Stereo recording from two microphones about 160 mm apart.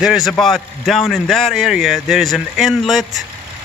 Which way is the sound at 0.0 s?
5° right (ahead or behind).